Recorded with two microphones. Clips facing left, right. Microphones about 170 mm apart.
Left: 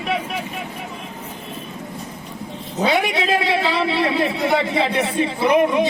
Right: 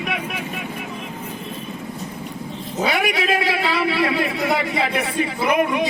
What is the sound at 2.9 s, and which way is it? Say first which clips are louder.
A man's voice: left 2 dB; 25° left (ahead or behind).